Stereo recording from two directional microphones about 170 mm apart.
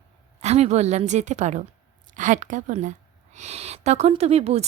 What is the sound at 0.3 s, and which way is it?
Speech, 40° right (ahead or behind).